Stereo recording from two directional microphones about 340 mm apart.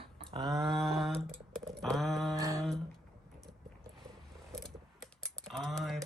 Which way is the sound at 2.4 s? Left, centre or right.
Centre.